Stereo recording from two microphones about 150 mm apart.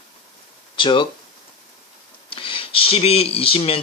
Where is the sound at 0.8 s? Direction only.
30° left (ahead or behind).